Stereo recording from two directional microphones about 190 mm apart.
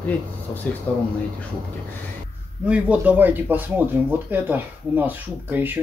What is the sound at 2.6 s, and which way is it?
Speech, 5° right (ahead or behind).